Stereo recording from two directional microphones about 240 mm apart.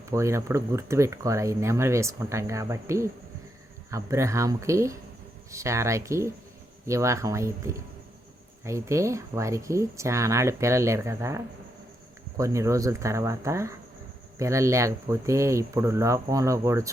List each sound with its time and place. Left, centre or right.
0.1 s speech: centre